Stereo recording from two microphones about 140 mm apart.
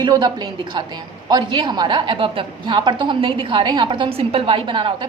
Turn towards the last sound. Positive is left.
turn(degrees=-35)  # may be behind; listen again after turning